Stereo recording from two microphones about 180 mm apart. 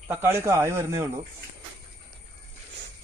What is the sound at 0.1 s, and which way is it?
Speech, 15° right (ahead or behind).